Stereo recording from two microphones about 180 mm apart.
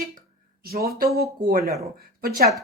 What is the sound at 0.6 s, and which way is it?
Speech, 60° right (ahead or behind).